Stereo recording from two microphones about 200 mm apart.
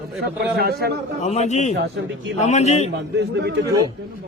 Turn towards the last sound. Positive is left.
turn(degrees=-60)  # may be behind; listen again after turning